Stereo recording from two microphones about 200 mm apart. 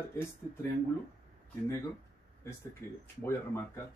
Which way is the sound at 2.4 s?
15° left (ahead or behind).